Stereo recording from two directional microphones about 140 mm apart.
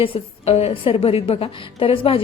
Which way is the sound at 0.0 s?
45° left (ahead or behind).